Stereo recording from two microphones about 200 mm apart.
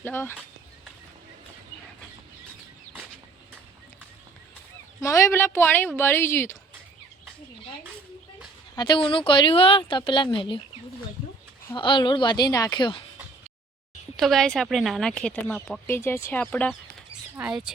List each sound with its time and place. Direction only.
0.0 s a woman's voice: 10° left (ahead or behind)
4.9 s a woman's voice: 15° left (ahead or behind)
8.7 s speech: 20° left (ahead or behind)
11.7 s speech: 25° left (ahead or behind)
14.2 s speech: centre (ahead or behind)
15.9 s a woman's voice: 10° left (ahead or behind)
17.3 s speech: 10° right (ahead or behind)